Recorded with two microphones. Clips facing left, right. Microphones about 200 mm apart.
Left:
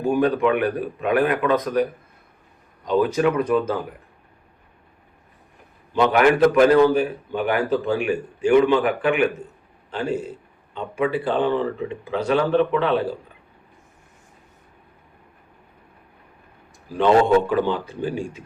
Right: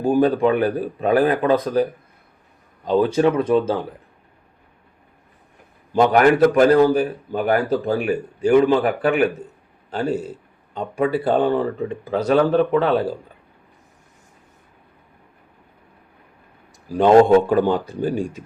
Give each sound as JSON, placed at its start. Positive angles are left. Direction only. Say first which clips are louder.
{"t": 0.0, "sound": "a man's voice", "louder": "right 3 dB", "side_deg": -35}
{"t": 5.9, "sound": "a man's voice", "louder": "right 2 dB", "side_deg": -45}
{"t": 17.5, "sound": "speech", "louder": "right 4 dB", "side_deg": -45}